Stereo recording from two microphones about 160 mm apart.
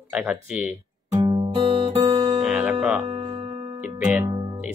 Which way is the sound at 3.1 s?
35° right (ahead or behind).